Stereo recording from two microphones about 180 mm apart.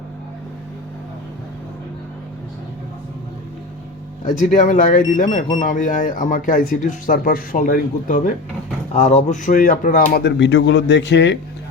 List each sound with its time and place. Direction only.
4.2 s speech: 45° left (ahead or behind)
10.2 s speech: 80° left